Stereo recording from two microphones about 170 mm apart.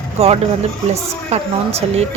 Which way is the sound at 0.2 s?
35° right (ahead or behind).